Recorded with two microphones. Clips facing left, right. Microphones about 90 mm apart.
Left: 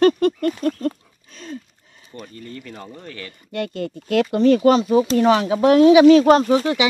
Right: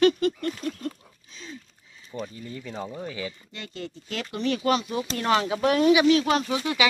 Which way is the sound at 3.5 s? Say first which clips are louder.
Left 12 dB; 55° left (ahead or behind).